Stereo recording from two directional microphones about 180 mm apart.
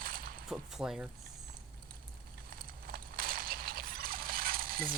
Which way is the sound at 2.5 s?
55° right (ahead or behind).